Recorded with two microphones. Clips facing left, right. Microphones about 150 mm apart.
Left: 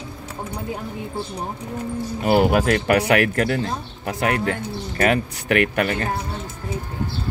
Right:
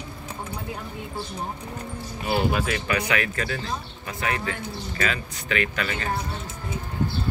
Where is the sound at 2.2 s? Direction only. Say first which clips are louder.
Left 7 dB; 65° left (ahead or behind).